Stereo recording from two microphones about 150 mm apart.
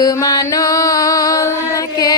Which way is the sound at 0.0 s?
25° left (ahead or behind).